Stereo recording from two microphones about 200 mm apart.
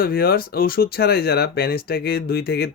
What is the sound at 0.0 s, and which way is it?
Speech, 50° left (ahead or behind).